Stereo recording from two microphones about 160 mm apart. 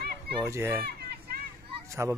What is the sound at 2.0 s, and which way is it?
Speech, 15° right (ahead or behind).